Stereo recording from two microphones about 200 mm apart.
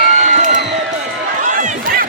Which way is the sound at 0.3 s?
40° right (ahead or behind).